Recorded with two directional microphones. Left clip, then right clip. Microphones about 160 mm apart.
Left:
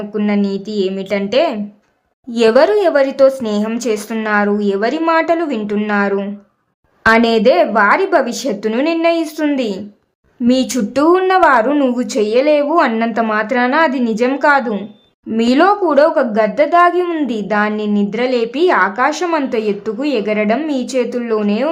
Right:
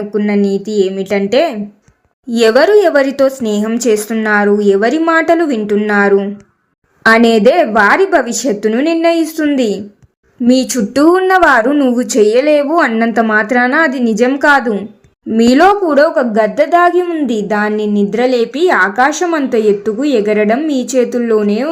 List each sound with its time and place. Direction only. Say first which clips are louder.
0.1 s a woman's voice: right 5 dB; 25° right (ahead or behind)